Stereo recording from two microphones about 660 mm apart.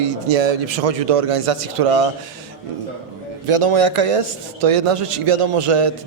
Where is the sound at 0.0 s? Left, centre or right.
Right.